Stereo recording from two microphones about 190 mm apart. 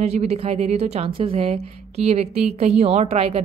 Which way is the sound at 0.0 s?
35° right (ahead or behind).